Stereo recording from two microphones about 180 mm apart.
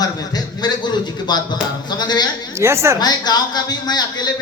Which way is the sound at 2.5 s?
15° right (ahead or behind).